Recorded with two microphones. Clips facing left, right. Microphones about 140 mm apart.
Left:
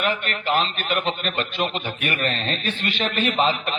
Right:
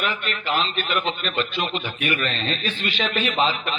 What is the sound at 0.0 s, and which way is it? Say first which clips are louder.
A man's voice: left 2 dB; 50° left (ahead or behind).